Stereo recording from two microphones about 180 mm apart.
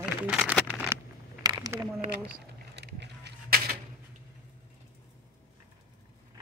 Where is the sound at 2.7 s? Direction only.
70° right (ahead or behind).